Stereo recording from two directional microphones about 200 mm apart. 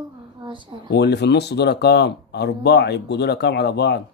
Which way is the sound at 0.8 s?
55° left (ahead or behind).